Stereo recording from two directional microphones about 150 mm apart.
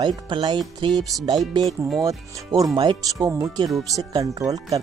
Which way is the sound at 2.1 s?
25° right (ahead or behind).